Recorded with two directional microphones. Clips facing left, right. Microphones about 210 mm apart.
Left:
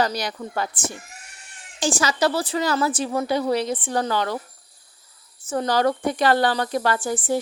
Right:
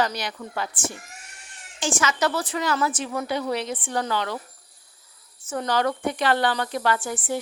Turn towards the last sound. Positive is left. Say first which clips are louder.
# left 3 dB
turn(degrees=35)  # may be behind; listen again after turning